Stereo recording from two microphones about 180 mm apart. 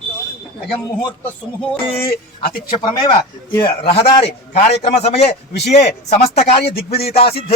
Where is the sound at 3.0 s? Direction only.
25° left (ahead or behind).